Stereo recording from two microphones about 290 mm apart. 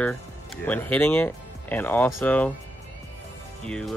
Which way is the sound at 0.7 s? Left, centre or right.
Centre.